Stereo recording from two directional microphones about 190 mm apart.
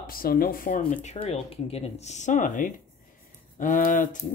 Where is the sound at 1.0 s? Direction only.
35° left (ahead or behind).